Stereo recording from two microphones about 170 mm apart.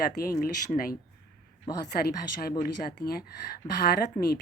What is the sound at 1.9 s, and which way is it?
A woman's voice, 65° left (ahead or behind).